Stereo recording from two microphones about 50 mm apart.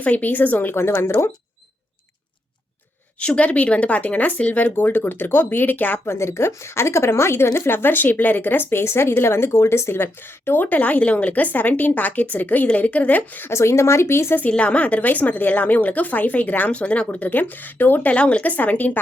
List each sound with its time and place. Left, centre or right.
0.0 s a woman's voice: left
0.8 s speech: left
3.2 s a woman's voice: left
6.1 s speech: left
8.7 s a woman's voice: left
13.5 s speech: left
14.5 s a woman's voice: left
18.1 s a woman's voice: left